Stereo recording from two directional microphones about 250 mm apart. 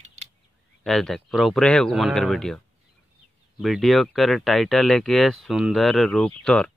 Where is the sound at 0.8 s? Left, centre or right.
Centre.